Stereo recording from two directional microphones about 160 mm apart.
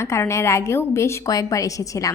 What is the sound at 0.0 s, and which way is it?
A woman's voice, 15° left (ahead or behind).